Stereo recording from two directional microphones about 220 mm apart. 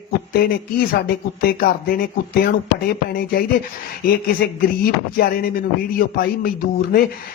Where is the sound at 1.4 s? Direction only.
45° left (ahead or behind).